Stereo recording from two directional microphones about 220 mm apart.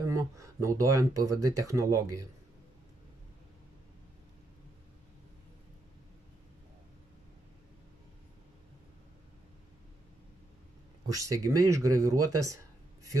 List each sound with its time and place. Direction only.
0.0 s speech: 15° right (ahead or behind)
1.3 s speech: 90° right
1.6 s speech: 15° right (ahead or behind)
11.1 s speech: 15° right (ahead or behind)
12.2 s speech: 90° right